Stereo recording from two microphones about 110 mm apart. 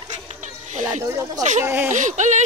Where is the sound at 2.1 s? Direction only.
90° right.